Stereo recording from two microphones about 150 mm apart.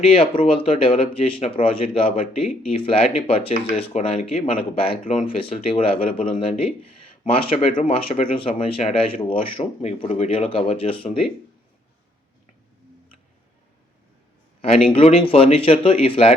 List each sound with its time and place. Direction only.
0.0 s speech: 40° left (ahead or behind)
14.9 s speech: 40° left (ahead or behind)